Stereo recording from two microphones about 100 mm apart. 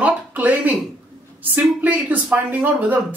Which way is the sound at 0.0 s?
15° right (ahead or behind).